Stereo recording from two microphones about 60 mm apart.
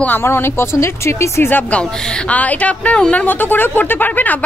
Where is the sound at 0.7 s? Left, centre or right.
Left.